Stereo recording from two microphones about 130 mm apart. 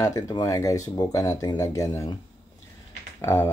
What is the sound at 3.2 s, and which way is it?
Speech, 20° left (ahead or behind).